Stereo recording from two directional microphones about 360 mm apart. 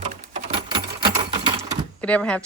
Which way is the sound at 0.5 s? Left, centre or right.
Centre.